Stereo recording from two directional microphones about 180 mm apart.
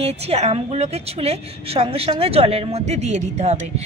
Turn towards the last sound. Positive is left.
turn(degrees=-40)  # may be behind; listen again after turning